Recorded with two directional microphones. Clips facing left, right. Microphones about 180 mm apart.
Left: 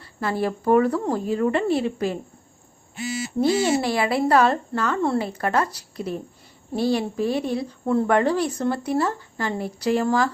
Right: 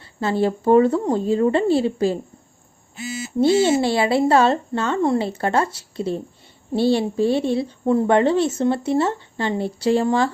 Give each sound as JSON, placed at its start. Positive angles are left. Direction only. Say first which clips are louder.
{"t": 0.0, "sound": "speech", "louder": "right 4 dB", "side_deg": -25}
{"t": 3.4, "sound": "speech", "louder": "right 4 dB", "side_deg": -25}